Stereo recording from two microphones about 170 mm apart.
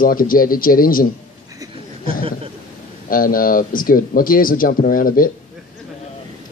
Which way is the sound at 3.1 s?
55° left (ahead or behind).